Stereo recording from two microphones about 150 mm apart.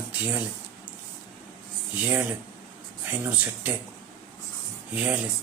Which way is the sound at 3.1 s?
10° right (ahead or behind).